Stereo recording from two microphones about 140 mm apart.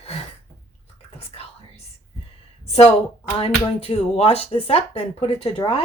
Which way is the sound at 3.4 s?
40° left (ahead or behind).